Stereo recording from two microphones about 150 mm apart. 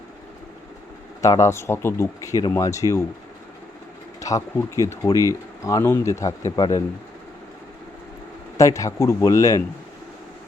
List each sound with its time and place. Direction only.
1.2 s speech: 20° left (ahead or behind)
4.2 s speech: 20° left (ahead or behind)
8.5 s speech: 20° left (ahead or behind)